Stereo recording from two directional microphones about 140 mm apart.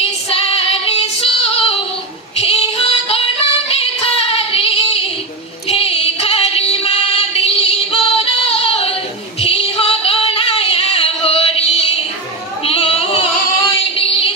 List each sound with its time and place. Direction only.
0.0 s female singing: 45° left (ahead or behind)
5.7 s music: 45° left (ahead or behind)
12.6 s a sound: 45° left (ahead or behind)
13.9 s music: 40° left (ahead or behind)